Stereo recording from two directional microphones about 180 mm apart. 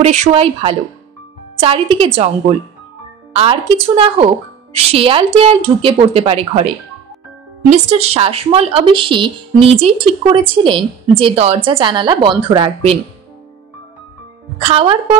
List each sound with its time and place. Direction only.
0.0 s a woman's voice: 35° right (ahead or behind)
3.3 s a woman's voice: 30° right (ahead or behind)
7.7 s speech: 35° right (ahead or behind)
14.7 s a woman's voice: 30° right (ahead or behind)